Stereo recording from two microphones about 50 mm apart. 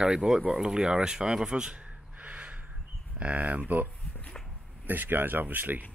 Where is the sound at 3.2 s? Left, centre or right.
Right.